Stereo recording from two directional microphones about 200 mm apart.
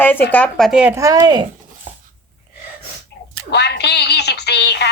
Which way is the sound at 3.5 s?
55° left (ahead or behind).